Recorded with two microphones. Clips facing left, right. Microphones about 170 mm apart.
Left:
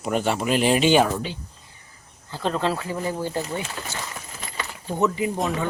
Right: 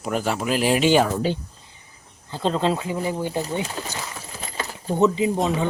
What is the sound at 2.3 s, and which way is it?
Speech, 20° right (ahead or behind).